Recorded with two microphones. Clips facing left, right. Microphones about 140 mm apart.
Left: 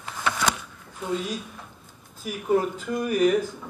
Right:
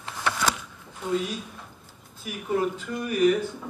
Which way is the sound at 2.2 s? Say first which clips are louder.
Left 3 dB; 40° left (ahead or behind).